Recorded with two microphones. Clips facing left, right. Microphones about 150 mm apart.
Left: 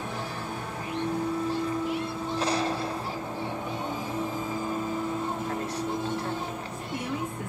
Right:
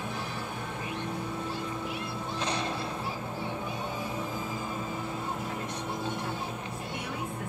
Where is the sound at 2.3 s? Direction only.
35° left (ahead or behind).